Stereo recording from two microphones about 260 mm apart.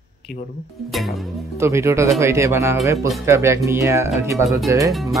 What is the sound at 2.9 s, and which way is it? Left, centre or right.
Speech, centre.